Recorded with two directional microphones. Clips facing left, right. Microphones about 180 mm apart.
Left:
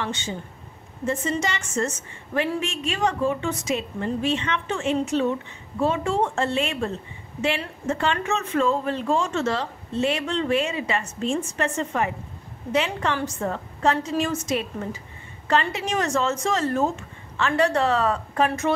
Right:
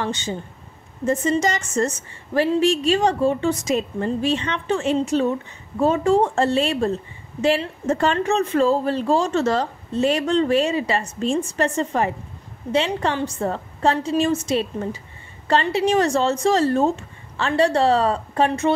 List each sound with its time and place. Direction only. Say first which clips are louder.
0.0 s a woman's voice: right 4 dB; 40° right (ahead or behind)